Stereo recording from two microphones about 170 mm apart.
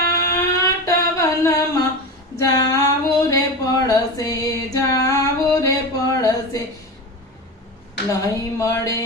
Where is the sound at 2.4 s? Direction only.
20° left (ahead or behind).